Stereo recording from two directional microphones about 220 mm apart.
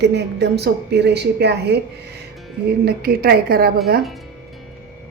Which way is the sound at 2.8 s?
45° right (ahead or behind).